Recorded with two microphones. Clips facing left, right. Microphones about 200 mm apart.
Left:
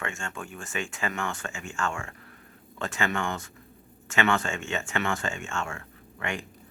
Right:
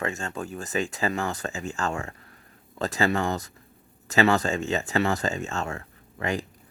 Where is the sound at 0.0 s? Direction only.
35° right (ahead or behind).